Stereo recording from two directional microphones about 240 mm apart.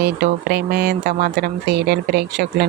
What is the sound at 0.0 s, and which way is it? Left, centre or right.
Speech, right.